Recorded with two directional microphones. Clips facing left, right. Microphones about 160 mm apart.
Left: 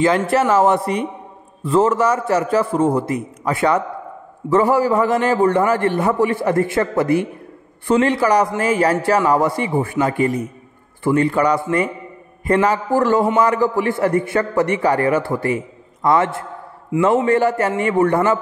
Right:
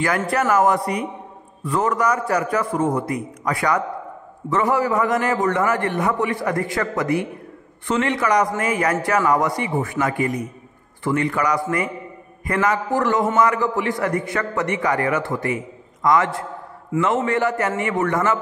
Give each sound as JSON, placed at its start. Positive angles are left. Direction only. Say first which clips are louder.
{"t": 0.3, "sound": "a man's voice", "louder": "left 3 dB", "side_deg": 25}